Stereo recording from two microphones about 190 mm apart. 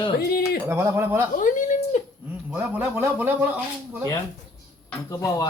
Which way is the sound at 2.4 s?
5° right (ahead or behind).